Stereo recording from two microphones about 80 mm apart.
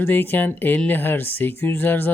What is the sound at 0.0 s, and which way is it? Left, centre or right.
Speech, left.